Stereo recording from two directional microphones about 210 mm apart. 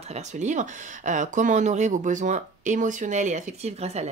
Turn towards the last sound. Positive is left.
turn(degrees=-30)  # may be behind; listen again after turning